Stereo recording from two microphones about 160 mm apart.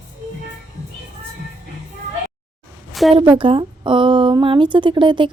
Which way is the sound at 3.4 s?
35° right (ahead or behind).